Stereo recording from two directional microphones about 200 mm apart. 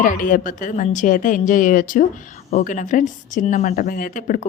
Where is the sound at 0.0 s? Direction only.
45° left (ahead or behind).